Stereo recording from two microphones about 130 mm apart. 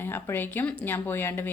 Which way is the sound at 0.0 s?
15° left (ahead or behind).